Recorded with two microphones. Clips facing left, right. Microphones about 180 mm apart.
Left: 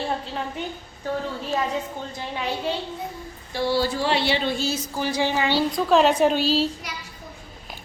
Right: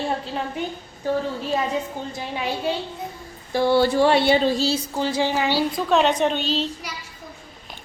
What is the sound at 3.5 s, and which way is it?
Speech, 55° right (ahead or behind).